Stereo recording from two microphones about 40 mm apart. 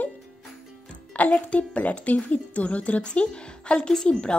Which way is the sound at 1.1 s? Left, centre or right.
Left.